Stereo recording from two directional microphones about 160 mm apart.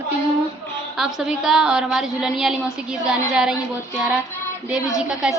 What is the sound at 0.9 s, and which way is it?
A woman's voice, 5° right (ahead or behind).